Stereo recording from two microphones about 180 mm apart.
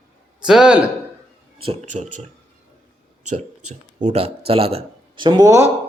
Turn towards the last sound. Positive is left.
turn(degrees=-15)  # may be behind; listen again after turning